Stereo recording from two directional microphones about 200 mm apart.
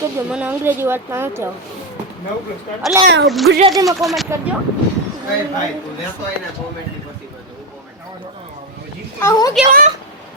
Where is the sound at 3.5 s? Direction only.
65° right (ahead or behind).